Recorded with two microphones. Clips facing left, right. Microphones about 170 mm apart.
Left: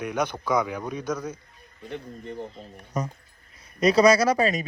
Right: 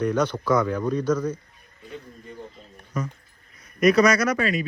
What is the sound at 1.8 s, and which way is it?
Speech, 65° left (ahead or behind).